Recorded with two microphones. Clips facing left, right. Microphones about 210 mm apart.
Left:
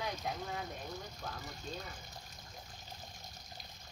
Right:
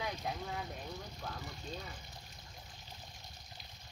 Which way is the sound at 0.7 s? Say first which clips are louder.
Left 1 dB; 45° left (ahead or behind).